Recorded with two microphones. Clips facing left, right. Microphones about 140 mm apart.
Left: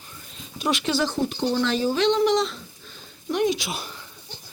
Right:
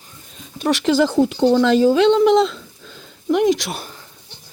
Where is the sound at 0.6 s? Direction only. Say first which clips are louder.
Right 7 dB; 75° right (ahead or behind).